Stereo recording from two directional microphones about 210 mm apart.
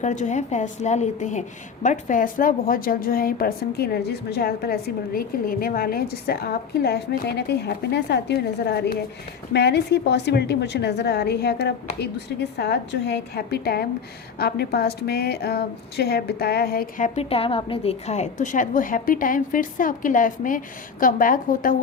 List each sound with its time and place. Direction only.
0.0 s a woman's voice: 35° left (ahead or behind)